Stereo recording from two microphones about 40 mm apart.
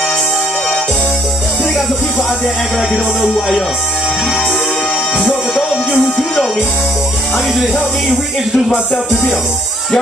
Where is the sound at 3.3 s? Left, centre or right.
Centre.